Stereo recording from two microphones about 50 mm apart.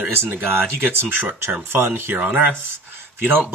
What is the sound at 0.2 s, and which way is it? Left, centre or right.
Speech, right.